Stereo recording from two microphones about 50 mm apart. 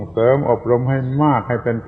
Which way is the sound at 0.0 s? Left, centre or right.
Centre.